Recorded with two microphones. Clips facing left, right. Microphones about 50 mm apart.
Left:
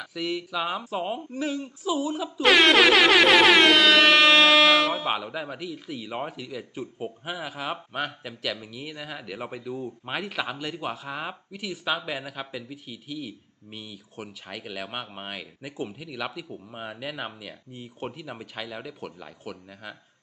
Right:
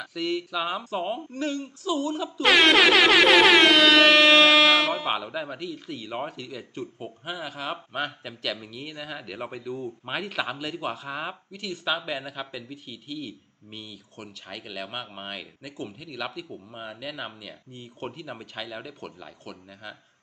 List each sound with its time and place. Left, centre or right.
0.0 s speech: centre